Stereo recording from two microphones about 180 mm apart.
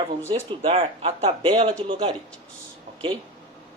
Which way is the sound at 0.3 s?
35° right (ahead or behind).